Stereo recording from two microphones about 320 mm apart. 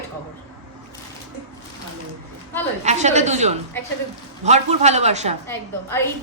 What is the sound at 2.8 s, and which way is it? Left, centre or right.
A man's voice, right.